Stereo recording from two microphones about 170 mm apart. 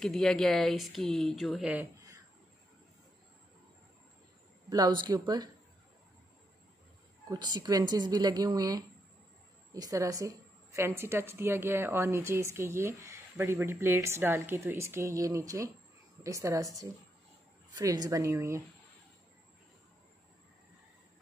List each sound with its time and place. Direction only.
0.0 s speech: centre (ahead or behind)
4.6 s a man's voice: 25° right (ahead or behind)
7.2 s a woman's voice: 25° right (ahead or behind)